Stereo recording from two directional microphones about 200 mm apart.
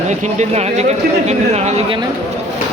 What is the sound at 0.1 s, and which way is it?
Speech, 35° right (ahead or behind).